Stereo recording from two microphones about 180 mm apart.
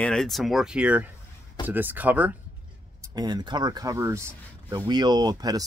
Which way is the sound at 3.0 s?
20° right (ahead or behind).